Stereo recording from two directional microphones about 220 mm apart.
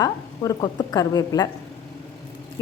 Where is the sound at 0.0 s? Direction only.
15° left (ahead or behind).